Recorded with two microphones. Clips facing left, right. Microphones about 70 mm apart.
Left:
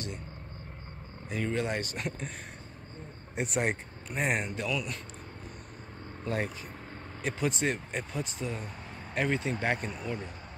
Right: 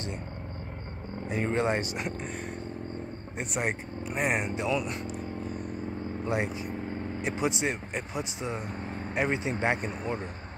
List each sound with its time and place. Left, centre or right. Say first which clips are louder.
1.3 s speech: right 4 dB; right
2.0 s speech: right 2 dB; centre
3.3 s speech: left 1 dB; centre
6.2 s speech: right 2 dB; centre; by 10.2 s right